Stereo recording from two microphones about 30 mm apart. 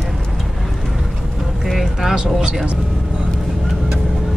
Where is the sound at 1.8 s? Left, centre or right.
Centre.